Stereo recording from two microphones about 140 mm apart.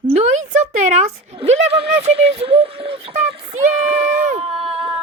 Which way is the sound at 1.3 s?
45° right (ahead or behind).